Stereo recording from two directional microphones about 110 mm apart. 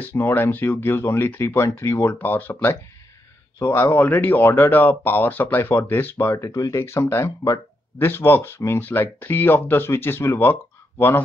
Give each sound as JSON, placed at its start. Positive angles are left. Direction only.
{"t": 0.0, "sound": "speech", "side_deg": 15}